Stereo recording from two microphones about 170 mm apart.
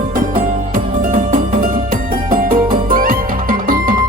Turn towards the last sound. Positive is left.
turn(degrees=-55)  # may be behind; listen again after turning